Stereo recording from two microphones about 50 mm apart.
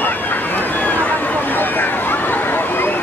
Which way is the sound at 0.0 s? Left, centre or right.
Left.